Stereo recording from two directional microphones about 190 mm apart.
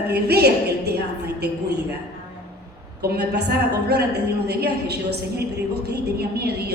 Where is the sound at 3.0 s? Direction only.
60° right (ahead or behind).